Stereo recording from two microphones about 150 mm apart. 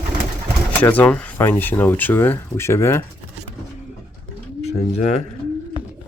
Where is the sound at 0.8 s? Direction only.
10° left (ahead or behind).